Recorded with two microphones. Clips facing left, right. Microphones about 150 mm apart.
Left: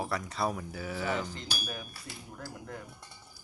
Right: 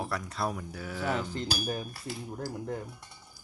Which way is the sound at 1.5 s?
35° right (ahead or behind).